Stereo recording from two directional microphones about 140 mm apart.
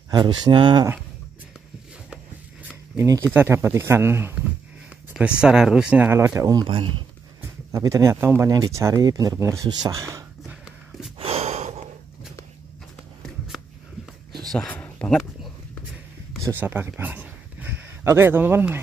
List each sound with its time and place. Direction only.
0.1 s speech: 30° right (ahead or behind)
3.0 s speech: 15° right (ahead or behind)
4.8 s a sound: 10° right (ahead or behind)
5.4 s speech: 5° right (ahead or behind); by 6.7 s 25° right (ahead or behind)
6.7 s speech: 40° right (ahead or behind)
7.7 s speech: 20° right (ahead or behind)
11.1 s a sound: 45° right (ahead or behind)
14.5 s a sound: 5° left (ahead or behind)
16.4 s speech: 15° right (ahead or behind)